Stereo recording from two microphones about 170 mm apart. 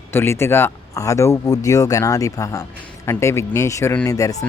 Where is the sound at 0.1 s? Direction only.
15° left (ahead or behind).